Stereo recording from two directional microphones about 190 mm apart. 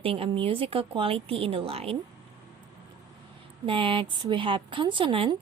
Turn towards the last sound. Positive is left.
turn(degrees=-25)  # may be behind; listen again after turning